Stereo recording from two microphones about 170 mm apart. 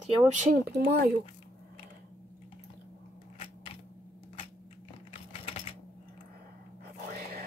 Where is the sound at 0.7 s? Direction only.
70° right (ahead or behind).